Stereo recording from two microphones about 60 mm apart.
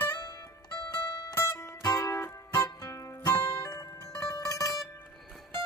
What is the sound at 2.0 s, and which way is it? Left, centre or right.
Music, left.